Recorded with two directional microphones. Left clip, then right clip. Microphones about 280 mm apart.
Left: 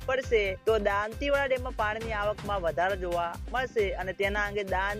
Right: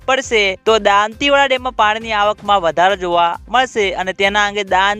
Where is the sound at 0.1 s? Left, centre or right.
Right.